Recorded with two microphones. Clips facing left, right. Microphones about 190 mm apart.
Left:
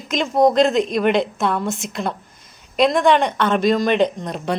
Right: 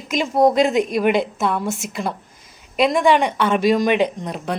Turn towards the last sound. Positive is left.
turn(degrees=-5)  # may be behind; listen again after turning